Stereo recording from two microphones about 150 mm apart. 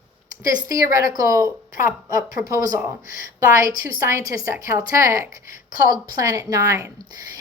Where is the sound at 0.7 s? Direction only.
20° right (ahead or behind).